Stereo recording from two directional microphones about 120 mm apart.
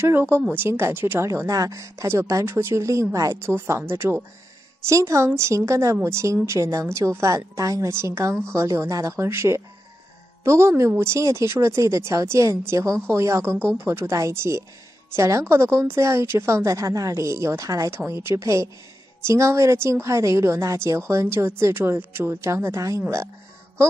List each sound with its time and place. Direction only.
0.0 s speech: 20° right (ahead or behind)